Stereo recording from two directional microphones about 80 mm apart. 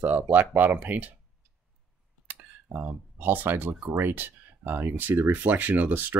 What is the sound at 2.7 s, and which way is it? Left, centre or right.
Speech, right.